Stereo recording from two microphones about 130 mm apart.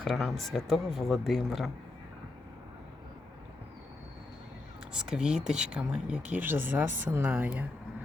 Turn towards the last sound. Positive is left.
turn(degrees=-10)  # may be behind; listen again after turning